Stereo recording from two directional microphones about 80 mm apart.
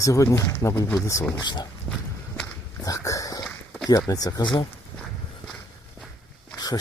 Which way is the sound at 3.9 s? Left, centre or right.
Left.